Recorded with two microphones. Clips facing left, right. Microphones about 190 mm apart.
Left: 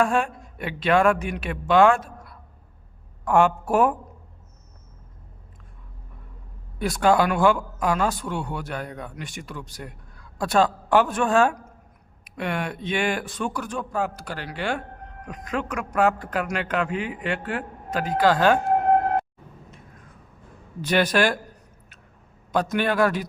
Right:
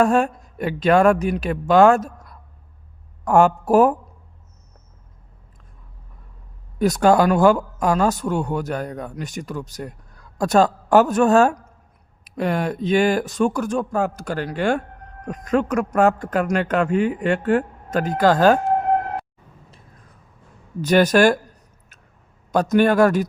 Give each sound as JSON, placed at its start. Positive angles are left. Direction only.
{"t": 0.0, "sound": "speech", "side_deg": -40}
{"t": 6.7, "sound": "speech", "side_deg": -40}
{"t": 20.8, "sound": "speech", "side_deg": -45}
{"t": 22.7, "sound": "speech", "side_deg": -45}